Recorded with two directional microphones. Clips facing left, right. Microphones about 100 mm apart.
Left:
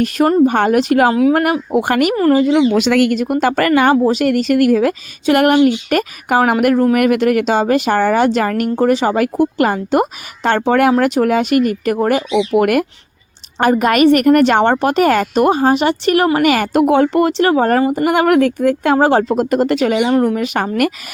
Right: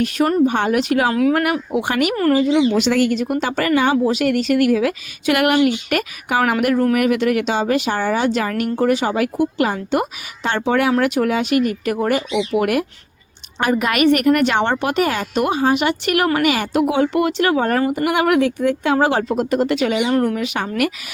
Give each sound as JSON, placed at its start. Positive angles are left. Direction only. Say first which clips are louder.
{"t": 0.4, "sound": "a woman's voice", "louder": "left 4 dB", "side_deg": 45}
{"t": 3.2, "sound": "speech", "louder": "left 5 dB", "side_deg": 50}
{"t": 4.0, "sound": "a woman's voice", "louder": "left 3 dB", "side_deg": 40}
{"t": 8.7, "sound": "a woman's voice", "louder": "left 3 dB", "side_deg": 35}
{"t": 13.6, "sound": "a woman's voice", "louder": "left 5 dB", "side_deg": 40}
{"t": 16.5, "sound": "speech", "louder": "left 5 dB", "side_deg": 50}
{"t": 18.9, "sound": "a woman's voice", "louder": "left 5 dB", "side_deg": 35}